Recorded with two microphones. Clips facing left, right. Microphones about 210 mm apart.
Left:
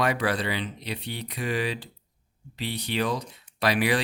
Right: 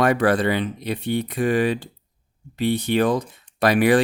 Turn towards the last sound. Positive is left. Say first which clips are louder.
# right 8 dB
turn(degrees=-50)  # may be behind; listen again after turning